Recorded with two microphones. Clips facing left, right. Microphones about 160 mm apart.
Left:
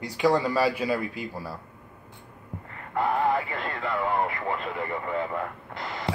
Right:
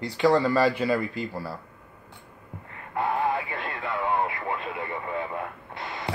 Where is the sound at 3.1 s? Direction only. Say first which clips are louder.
Left 2 dB; 35° left (ahead or behind).